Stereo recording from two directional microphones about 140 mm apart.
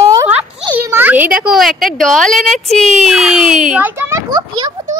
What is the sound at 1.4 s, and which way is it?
A child's voice, centre (ahead or behind).